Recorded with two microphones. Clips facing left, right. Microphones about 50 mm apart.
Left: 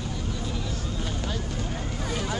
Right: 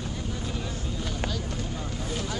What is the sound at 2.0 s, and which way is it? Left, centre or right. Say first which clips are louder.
Vehicle: left 3 dB; centre.